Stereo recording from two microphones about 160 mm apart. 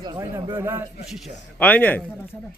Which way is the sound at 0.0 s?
25° right (ahead or behind).